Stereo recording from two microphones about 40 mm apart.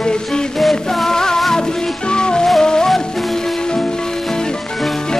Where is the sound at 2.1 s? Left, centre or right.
Left.